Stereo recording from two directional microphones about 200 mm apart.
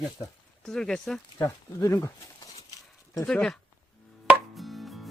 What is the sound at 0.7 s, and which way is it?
Speech, 5° left (ahead or behind).